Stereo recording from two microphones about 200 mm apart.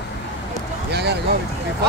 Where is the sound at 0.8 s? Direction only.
55° right (ahead or behind).